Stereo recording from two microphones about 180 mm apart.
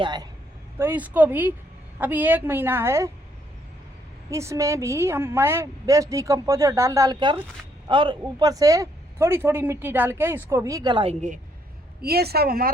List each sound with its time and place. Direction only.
0.0 s speech: 25° right (ahead or behind)
0.8 s a woman's voice: 10° right (ahead or behind)
4.3 s a woman's voice: 15° right (ahead or behind); by 11.3 s 40° right (ahead or behind)
12.0 s speech: 60° right (ahead or behind)